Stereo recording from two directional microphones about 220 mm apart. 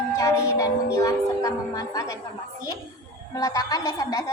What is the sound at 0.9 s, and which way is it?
A woman's voice, 15° left (ahead or behind).